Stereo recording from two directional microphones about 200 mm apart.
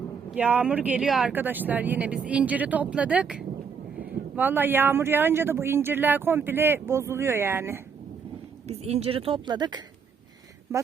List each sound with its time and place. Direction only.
0.3 s speech: 10° right (ahead or behind)
8.6 s a woman's voice: 30° right (ahead or behind)